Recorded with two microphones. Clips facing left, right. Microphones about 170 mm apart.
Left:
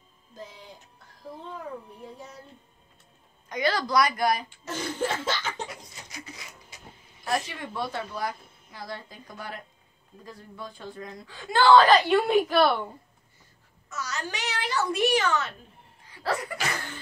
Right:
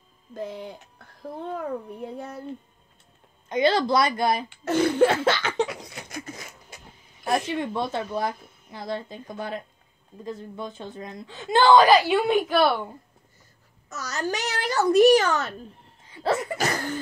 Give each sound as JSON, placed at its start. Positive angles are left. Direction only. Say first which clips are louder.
{"t": 0.3, "sound": "a child's voice", "louder": "right 10 dB", "side_deg": -60}
{"t": 3.4, "sound": "speech", "louder": "right 6 dB", "side_deg": -25}
{"t": 4.5, "sound": "laughter", "louder": "right 11 dB", "side_deg": -65}
{"t": 7.2, "sound": "speech", "louder": "right 5 dB", "side_deg": -25}
{"t": 13.8, "sound": "a child's voice", "louder": "right 5 dB", "side_deg": -40}
{"t": 16.1, "sound": "laughter", "louder": "right 5 dB", "side_deg": -25}
{"t": 16.5, "sound": "a child's voice", "louder": "right 6 dB", "side_deg": -40}